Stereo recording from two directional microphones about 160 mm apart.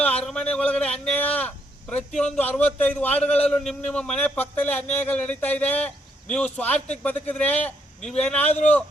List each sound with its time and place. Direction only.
0.3 s speech: 5° left (ahead or behind)
1.0 s a sound: 10° left (ahead or behind)
2.6 s a man's voice: 10° left (ahead or behind)
8.4 s a man's voice: 45° left (ahead or behind)